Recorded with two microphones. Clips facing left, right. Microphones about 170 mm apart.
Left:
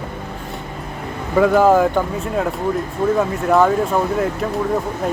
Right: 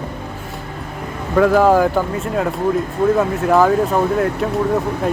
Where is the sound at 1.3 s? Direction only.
Centre (ahead or behind).